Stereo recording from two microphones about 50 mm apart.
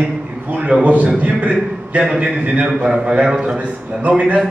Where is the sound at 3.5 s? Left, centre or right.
Right.